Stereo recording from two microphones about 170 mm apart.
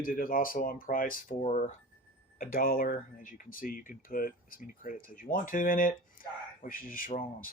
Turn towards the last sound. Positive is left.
turn(degrees=55)  # may be behind; listen again after turning